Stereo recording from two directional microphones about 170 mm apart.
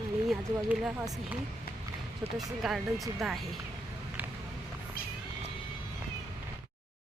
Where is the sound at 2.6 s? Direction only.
Centre (ahead or behind).